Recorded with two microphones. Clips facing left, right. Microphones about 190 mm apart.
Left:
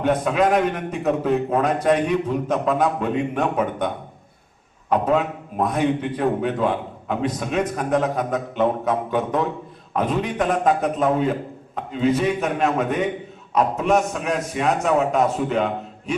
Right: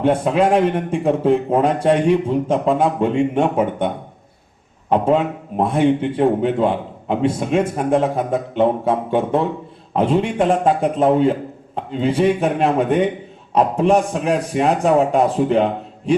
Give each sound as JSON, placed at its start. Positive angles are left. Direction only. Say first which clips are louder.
{"t": 0.0, "sound": "a man's voice", "louder": "right 3 dB", "side_deg": -30}
{"t": 4.9, "sound": "a man's voice", "louder": "right 3 dB", "side_deg": -30}